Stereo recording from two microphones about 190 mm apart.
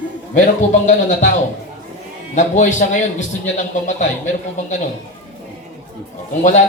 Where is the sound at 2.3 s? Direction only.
40° left (ahead or behind).